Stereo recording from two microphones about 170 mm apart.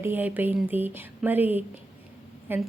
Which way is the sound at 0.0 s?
10° right (ahead or behind).